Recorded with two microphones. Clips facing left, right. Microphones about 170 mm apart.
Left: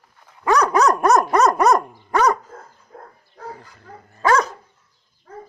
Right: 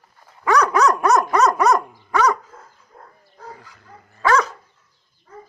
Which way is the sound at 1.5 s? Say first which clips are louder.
Left 1 dB; 45° left (ahead or behind).